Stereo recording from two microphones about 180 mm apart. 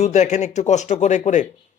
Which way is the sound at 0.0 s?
40° left (ahead or behind).